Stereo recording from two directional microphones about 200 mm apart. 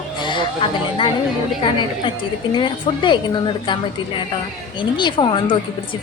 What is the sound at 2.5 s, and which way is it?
A woman's voice, 25° left (ahead or behind).